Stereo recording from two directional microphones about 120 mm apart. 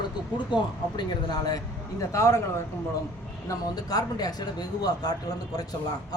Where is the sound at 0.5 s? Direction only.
35° left (ahead or behind).